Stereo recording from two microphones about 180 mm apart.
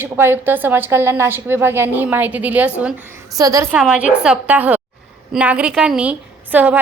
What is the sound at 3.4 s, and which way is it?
Speech, 20° right (ahead or behind).